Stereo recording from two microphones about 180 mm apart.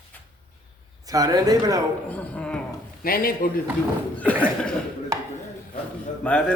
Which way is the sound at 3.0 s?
55° left (ahead or behind).